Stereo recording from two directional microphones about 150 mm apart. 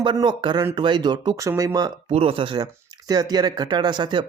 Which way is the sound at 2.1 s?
40° right (ahead or behind).